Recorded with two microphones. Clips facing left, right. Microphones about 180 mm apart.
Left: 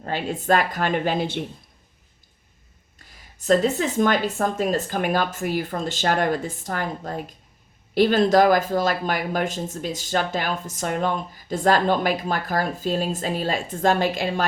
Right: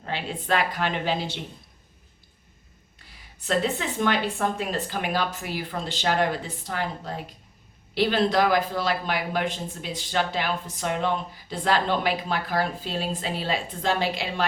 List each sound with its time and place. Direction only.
0.0 s speech: 45° left (ahead or behind)
3.4 s speech: 40° left (ahead or behind)